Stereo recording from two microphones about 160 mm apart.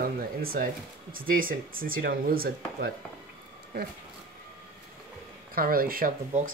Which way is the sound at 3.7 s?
90° right.